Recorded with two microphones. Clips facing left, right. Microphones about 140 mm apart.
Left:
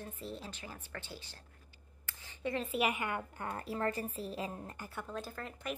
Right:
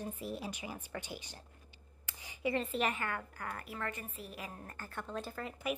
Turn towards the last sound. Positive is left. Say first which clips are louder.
# right 2 dB
turn(degrees=0)  # may be behind; listen again after turning